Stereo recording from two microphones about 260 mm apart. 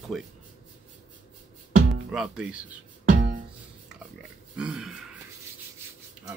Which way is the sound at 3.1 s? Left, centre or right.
Right.